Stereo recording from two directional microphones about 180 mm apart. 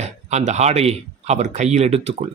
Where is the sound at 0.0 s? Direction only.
40° right (ahead or behind).